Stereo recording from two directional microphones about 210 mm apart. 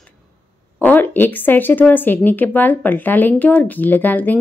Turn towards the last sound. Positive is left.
turn(degrees=10)  # may be behind; listen again after turning